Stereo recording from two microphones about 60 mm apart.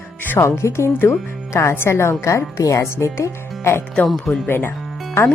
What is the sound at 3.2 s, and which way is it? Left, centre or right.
Speech, left.